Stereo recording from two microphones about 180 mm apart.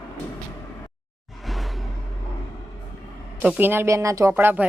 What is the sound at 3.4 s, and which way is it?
Speech, 10° right (ahead or behind).